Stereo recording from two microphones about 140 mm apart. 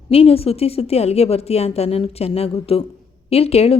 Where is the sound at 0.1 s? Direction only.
45° left (ahead or behind).